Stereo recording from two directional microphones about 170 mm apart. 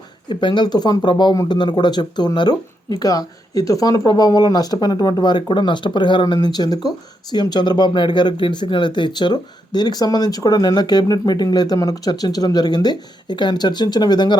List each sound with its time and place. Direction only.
0.3 s speech: 25° left (ahead or behind)